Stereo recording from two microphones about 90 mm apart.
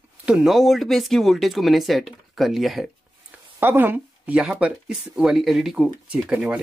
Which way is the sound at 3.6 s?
25° right (ahead or behind).